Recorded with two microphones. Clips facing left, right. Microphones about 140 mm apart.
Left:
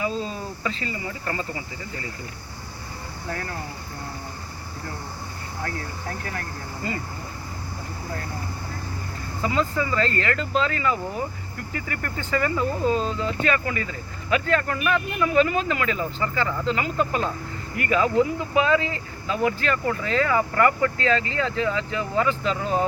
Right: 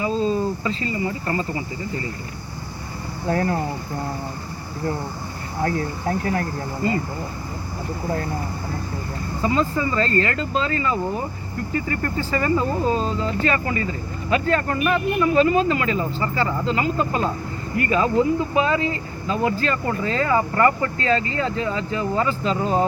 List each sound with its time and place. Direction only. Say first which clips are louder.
0.6 s speech: right 5 dB; 35° right (ahead or behind)
3.2 s speech: right 11 dB; 30° right (ahead or behind)
5.6 s speech: right 10 dB; 30° right (ahead or behind)
9.4 s speech: right 3 dB; 30° right (ahead or behind)